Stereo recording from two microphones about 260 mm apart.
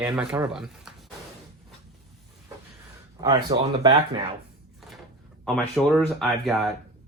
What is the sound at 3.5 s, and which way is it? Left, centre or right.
Speech, right.